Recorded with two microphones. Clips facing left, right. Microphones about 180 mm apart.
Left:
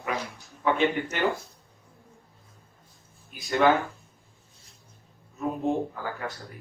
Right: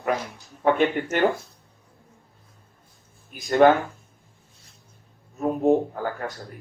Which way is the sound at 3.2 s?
45° right (ahead or behind).